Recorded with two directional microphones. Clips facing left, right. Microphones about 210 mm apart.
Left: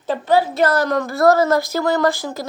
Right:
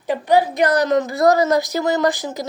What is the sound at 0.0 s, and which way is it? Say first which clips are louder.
A woman's voice: right 1 dB; 15° right (ahead or behind).